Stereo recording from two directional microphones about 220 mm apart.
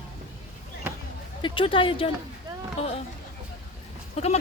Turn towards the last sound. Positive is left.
turn(degrees=30)  # may be behind; listen again after turning